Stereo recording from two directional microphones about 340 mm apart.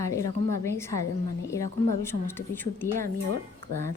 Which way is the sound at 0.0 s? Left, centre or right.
Centre.